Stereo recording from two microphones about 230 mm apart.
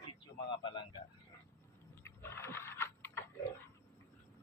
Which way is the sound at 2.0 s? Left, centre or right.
Centre.